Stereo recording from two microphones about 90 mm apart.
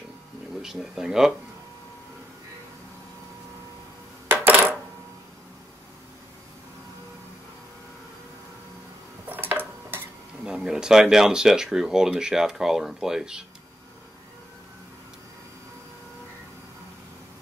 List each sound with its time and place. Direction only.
0.6 s speech: 5° right (ahead or behind)
4.3 s coin: 25° right (ahead or behind)
9.3 s a sound: 20° right (ahead or behind)
10.4 s speech: 10° right (ahead or behind)